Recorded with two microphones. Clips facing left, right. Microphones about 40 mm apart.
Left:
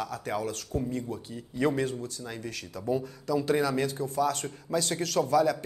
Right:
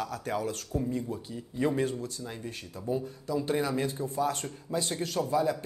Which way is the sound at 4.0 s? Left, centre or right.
Right.